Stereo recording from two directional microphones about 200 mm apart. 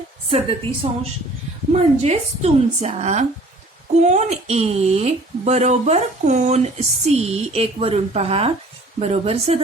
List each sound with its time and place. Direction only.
0.3 s a woman's voice: 30° right (ahead or behind)